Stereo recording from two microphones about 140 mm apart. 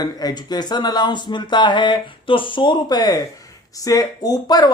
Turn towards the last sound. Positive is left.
turn(degrees=25)  # may be behind; listen again after turning